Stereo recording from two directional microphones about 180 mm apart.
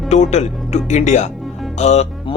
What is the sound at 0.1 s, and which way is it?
Speech, 40° left (ahead or behind).